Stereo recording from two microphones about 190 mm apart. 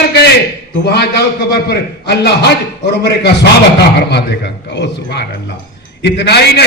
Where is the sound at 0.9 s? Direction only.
60° left (ahead or behind).